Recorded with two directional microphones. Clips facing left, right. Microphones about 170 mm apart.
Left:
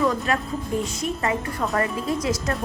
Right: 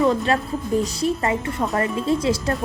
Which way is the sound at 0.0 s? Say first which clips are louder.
Right 4 dB; 30° right (ahead or behind).